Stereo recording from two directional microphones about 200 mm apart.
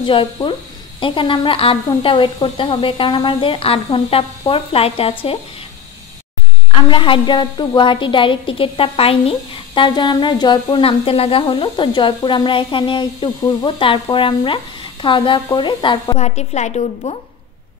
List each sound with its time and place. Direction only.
0.0 s speech: 25° left (ahead or behind)
6.7 s speech: 25° left (ahead or behind)